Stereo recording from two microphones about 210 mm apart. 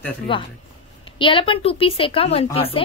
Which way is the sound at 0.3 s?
25° left (ahead or behind).